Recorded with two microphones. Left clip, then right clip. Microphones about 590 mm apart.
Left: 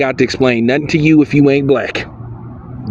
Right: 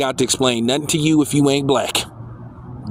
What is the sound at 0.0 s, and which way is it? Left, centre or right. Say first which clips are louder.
Speech: left 5 dB; right.